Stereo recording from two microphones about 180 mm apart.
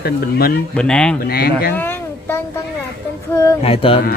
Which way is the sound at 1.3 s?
60° left (ahead or behind).